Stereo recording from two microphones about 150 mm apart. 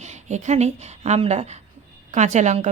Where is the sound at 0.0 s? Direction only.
50° right (ahead or behind).